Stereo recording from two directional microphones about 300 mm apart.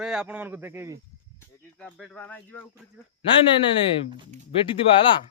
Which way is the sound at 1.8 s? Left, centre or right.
Centre.